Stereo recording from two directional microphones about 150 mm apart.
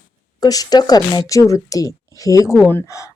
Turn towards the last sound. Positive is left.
turn(degrees=20)  # may be behind; listen again after turning